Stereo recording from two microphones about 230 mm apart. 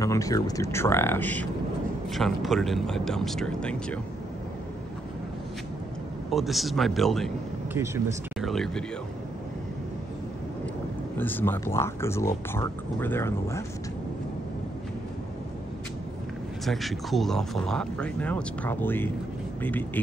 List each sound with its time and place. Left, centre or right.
0.0 s speech: centre
6.3 s speech: centre
7.7 s speech: centre
8.4 s speech: centre
11.1 s speech: centre
16.6 s speech: centre